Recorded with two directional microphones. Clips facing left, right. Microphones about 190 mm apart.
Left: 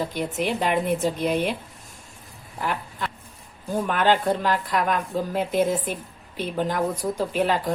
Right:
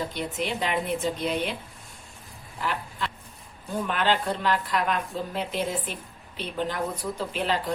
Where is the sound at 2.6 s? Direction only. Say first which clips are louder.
Left 2 dB; 50° left (ahead or behind).